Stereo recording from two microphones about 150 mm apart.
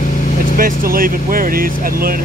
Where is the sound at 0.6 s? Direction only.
70° right (ahead or behind).